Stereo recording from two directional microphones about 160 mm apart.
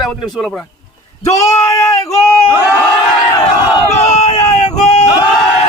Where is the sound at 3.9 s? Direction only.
45° left (ahead or behind).